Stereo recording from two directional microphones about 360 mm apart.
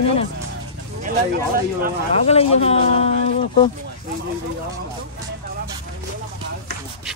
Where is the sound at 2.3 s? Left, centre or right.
Centre.